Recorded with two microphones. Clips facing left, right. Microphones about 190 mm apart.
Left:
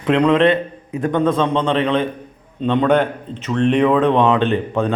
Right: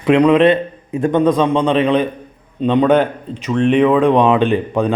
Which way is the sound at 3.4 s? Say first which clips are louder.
Right 2 dB; 5° right (ahead or behind).